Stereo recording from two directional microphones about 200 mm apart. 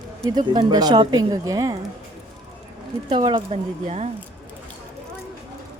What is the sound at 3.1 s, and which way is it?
Speech, 25° right (ahead or behind).